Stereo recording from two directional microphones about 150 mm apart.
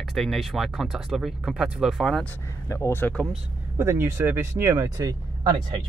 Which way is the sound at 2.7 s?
20° left (ahead or behind).